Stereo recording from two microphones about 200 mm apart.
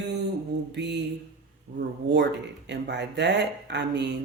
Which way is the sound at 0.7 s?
60° right (ahead or behind).